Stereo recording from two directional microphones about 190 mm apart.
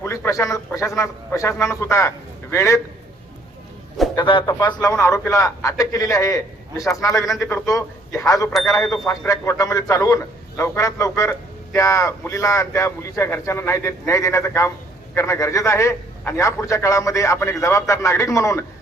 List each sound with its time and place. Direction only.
0.0 s a man's voice: 15° left (ahead or behind)
4.1 s a man's voice: 25° left (ahead or behind)
7.3 s a man's voice: centre (ahead or behind)
7.5 s a man's voice: 15° left (ahead or behind)
8.7 s a man's voice: centre (ahead or behind)
9.0 s a man's voice: 15° left (ahead or behind)